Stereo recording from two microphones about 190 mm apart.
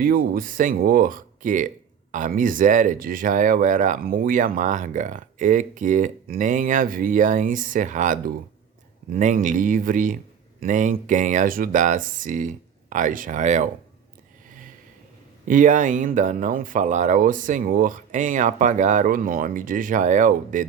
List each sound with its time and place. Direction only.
0.0 s speech: 50° right (ahead or behind)
15.4 s speech: 45° right (ahead or behind)